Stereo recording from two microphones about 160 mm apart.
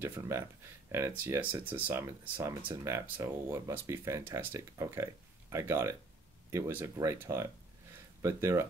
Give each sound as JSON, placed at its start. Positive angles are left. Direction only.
{"t": 0.0, "sound": "speech", "side_deg": -15}